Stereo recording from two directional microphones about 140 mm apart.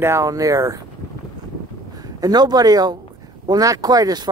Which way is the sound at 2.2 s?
30° right (ahead or behind).